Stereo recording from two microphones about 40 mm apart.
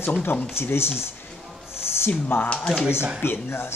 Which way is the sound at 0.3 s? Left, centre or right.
Left.